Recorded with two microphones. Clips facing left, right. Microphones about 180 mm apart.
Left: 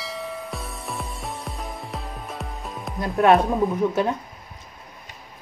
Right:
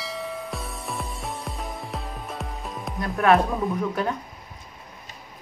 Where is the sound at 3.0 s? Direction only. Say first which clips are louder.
Left 2 dB; 25° left (ahead or behind).